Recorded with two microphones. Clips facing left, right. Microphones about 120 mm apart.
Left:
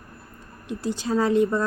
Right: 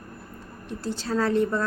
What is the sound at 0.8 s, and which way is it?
Speech, 15° left (ahead or behind).